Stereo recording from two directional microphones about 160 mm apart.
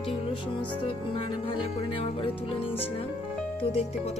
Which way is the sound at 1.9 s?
35° left (ahead or behind).